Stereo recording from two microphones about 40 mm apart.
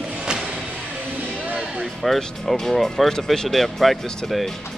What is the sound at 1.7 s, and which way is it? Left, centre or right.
Speech, centre.